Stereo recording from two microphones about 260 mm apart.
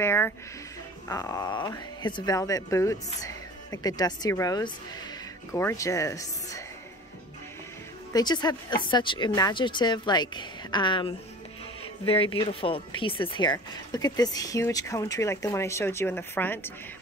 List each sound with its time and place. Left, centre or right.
0.0 s speech: centre
8.1 s speech: centre